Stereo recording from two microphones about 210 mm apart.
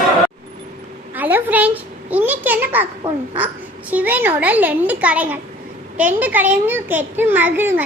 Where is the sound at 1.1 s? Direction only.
10° right (ahead or behind).